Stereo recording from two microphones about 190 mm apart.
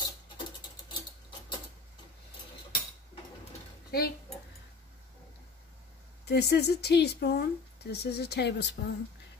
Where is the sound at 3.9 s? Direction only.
55° left (ahead or behind).